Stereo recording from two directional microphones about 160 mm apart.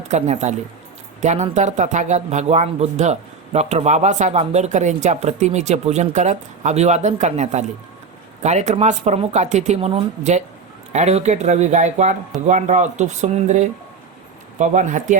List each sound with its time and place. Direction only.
0.1 s a man's voice: 45° right (ahead or behind)